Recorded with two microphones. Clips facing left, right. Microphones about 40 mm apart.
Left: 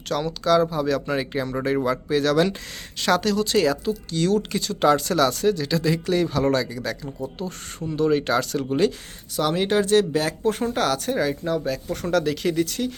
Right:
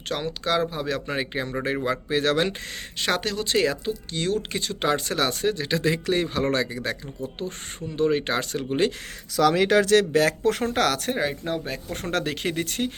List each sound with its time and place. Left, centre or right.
0.1 s speech: right
3.0 s speech: right
7.9 s speech: right
9.7 s speech: right
11.2 s speech: right